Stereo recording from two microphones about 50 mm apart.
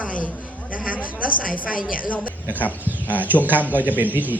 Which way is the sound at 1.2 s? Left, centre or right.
Right.